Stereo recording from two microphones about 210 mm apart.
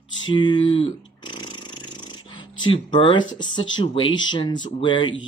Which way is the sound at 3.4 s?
20° left (ahead or behind).